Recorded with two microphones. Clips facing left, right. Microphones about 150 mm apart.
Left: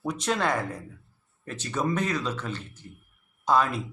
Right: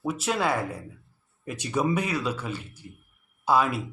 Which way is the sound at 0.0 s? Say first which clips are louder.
Right 1 dB; 5° right (ahead or behind).